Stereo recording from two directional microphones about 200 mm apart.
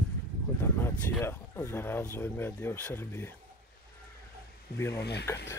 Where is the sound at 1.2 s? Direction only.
10° left (ahead or behind).